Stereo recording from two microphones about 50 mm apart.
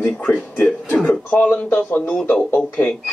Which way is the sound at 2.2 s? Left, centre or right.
Left.